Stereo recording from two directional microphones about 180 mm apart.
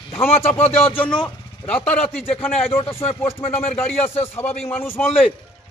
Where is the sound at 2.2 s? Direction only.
30° left (ahead or behind).